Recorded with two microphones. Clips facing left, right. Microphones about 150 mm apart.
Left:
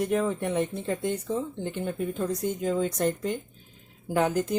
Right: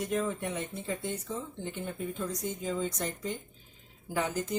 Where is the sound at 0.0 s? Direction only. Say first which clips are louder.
Left 6 dB; 65° left (ahead or behind).